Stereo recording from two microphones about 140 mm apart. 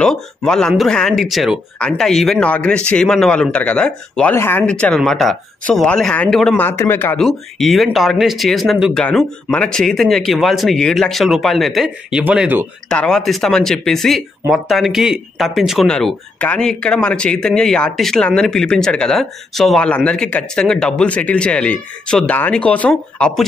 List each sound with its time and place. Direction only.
0.5 s speech: 5° left (ahead or behind)
7.2 s speech: centre (ahead or behind)
12.9 s speech: 5° left (ahead or behind)